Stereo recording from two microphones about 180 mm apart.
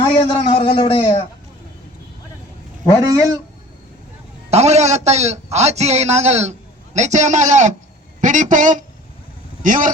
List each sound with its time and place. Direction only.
0.0 s speech: 25° left (ahead or behind)
3.0 s speech: 20° right (ahead or behind)
4.5 s a man's voice: 40° right (ahead or behind)